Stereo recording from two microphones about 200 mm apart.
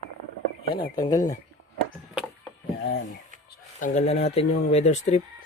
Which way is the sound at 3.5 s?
40° left (ahead or behind).